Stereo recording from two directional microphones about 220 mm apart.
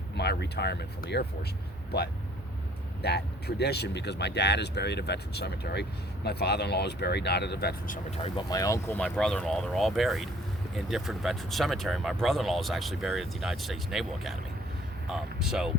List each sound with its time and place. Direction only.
0.2 s speech: 45° left (ahead or behind)
3.0 s speech: 50° left (ahead or behind)
8.1 s speech: 25° left (ahead or behind); by 15.7 s centre (ahead or behind)